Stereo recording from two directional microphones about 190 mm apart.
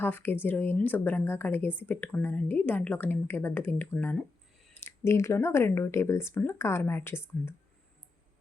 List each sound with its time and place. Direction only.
0.0 s speech: 10° left (ahead or behind)